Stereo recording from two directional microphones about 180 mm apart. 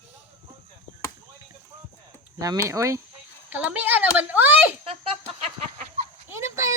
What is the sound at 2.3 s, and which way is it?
A child's voice, 20° right (ahead or behind).